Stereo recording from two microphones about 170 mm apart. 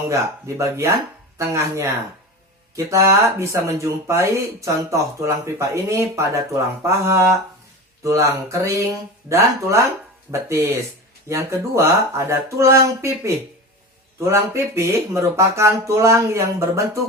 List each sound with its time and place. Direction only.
0.1 s speech: 20° right (ahead or behind)
11.3 s speech: 15° right (ahead or behind)